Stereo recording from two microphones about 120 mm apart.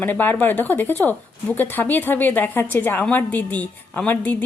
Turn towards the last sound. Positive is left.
turn(degrees=15)  # may be behind; listen again after turning